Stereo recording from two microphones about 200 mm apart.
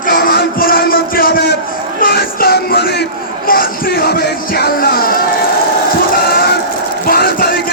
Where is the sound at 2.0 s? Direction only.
50° left (ahead or behind).